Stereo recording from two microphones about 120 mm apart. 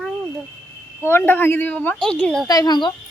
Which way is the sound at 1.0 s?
20° left (ahead or behind).